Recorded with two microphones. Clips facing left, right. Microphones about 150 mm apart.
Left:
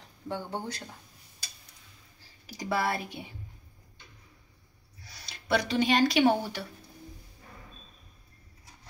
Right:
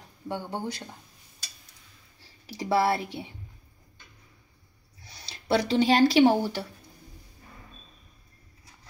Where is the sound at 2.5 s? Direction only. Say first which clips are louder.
Right 6 dB; 30° right (ahead or behind).